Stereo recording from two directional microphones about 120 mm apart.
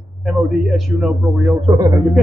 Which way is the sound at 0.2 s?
Centre (ahead or behind).